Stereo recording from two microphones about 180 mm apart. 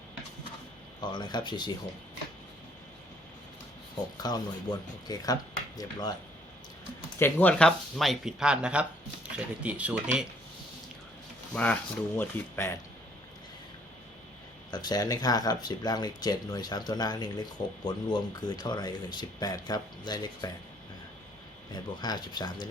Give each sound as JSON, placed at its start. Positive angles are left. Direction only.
{"t": 1.1, "sound": "speech", "side_deg": 25}
{"t": 4.2, "sound": "speech", "side_deg": 20}
{"t": 7.2, "sound": "speech", "side_deg": 10}
{"t": 11.5, "sound": "speech", "side_deg": 5}
{"t": 14.7, "sound": "speech", "side_deg": 20}
{"t": 21.7, "sound": "speech", "side_deg": 25}